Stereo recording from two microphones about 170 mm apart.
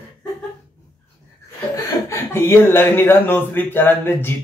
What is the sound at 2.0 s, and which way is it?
Speech, 15° left (ahead or behind).